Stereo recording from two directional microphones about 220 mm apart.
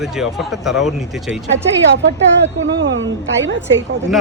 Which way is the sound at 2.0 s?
55° right (ahead or behind).